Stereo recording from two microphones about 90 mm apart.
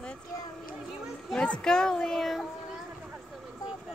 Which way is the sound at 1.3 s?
10° left (ahead or behind).